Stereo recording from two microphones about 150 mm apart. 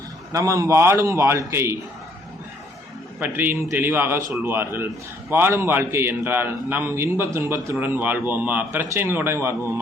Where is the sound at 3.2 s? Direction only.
15° right (ahead or behind).